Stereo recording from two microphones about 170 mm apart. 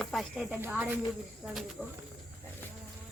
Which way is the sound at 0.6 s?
10° right (ahead or behind).